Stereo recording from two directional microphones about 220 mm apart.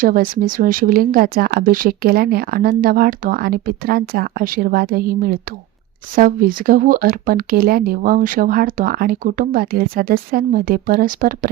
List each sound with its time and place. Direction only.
0.0 s speech: 40° right (ahead or behind)